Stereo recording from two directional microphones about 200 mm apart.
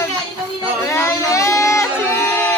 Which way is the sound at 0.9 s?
15° left (ahead or behind).